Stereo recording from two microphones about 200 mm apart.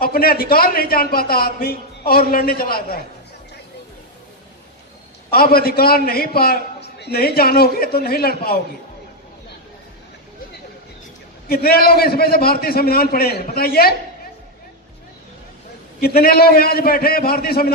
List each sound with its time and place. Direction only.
0.0 s a man's voice: 50° left (ahead or behind)
5.3 s a man's voice: 50° left (ahead or behind)
11.4 s a man's voice: 50° left (ahead or behind)
16.0 s a man's voice: 50° left (ahead or behind)